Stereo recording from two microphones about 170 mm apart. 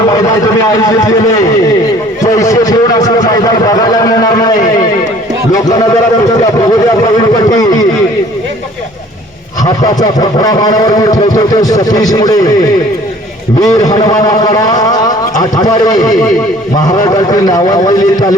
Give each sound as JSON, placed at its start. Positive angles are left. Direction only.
{"t": 0.1, "sound": "a man's voice", "side_deg": 20}
{"t": 2.2, "sound": "a sound", "side_deg": 20}
{"t": 3.3, "sound": "a man's voice", "side_deg": 20}
{"t": 9.6, "sound": "a man's voice", "side_deg": 20}
{"t": 13.6, "sound": "a man's voice", "side_deg": 20}